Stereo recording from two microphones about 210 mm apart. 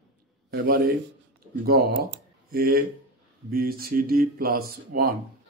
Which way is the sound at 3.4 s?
45° right (ahead or behind).